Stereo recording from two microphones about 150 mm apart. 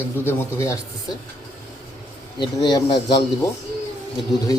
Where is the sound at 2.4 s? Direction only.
30° left (ahead or behind).